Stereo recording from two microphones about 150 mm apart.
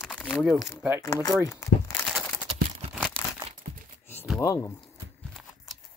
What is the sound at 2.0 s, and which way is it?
Crumpling, 10° left (ahead or behind).